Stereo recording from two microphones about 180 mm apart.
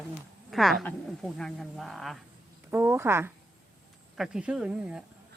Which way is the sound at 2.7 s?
10° right (ahead or behind).